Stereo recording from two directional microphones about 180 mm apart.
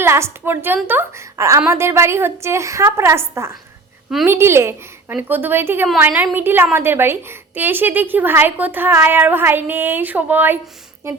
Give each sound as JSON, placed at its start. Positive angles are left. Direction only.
{"t": 0.0, "sound": "a woman's voice", "side_deg": -15}